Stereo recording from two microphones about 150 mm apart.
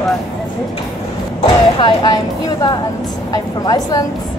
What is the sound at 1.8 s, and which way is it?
A woman's voice, 25° left (ahead or behind).